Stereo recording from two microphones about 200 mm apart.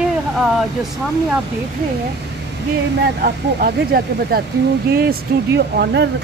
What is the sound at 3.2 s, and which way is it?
Speech, 55° right (ahead or behind).